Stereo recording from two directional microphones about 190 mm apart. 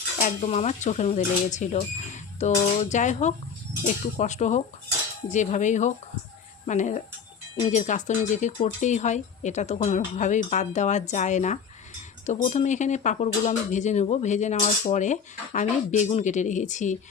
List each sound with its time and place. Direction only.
0.2 s speech: 40° left (ahead or behind)